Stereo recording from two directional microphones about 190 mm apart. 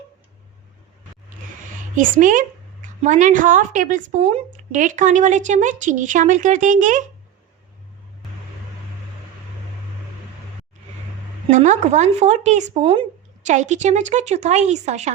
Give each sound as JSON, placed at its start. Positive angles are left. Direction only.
{"t": 2.0, "sound": "a woman's voice", "side_deg": -45}
{"t": 11.4, "sound": "a woman's voice", "side_deg": -40}